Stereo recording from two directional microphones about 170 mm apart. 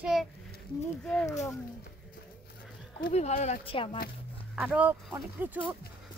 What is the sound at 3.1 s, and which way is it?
Speech, 40° left (ahead or behind).